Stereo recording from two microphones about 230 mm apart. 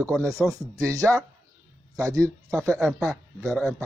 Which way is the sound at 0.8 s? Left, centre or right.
Centre.